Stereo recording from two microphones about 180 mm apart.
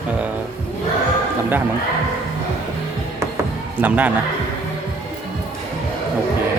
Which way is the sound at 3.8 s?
10° right (ahead or behind).